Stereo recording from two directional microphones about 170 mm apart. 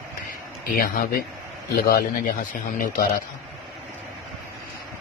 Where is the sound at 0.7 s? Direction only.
55° left (ahead or behind).